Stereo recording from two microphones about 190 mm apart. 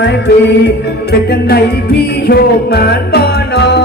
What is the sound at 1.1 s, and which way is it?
Music, 55° left (ahead or behind).